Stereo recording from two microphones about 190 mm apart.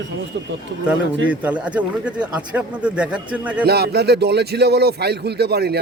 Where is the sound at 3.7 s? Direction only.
55° right (ahead or behind).